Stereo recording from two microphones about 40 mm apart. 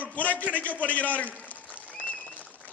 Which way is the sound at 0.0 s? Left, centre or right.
Left.